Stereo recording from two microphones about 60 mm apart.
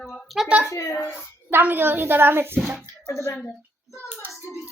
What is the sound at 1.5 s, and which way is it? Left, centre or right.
A woman's voice, right.